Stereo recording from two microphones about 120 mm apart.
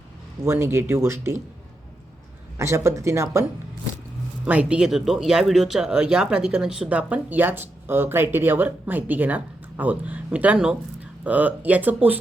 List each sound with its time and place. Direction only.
0.4 s speech: 20° right (ahead or behind)
2.6 s speech: 25° right (ahead or behind)
4.4 s speech: 10° right (ahead or behind)